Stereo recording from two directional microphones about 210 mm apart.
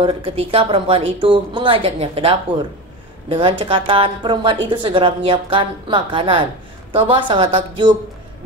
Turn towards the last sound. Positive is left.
turn(degrees=-25)  # may be behind; listen again after turning